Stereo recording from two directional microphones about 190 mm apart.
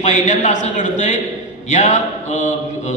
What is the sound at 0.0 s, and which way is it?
A man's voice, 40° left (ahead or behind).